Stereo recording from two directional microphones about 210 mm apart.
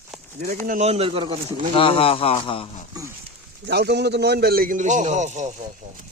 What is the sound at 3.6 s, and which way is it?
A man's voice, 50° right (ahead or behind).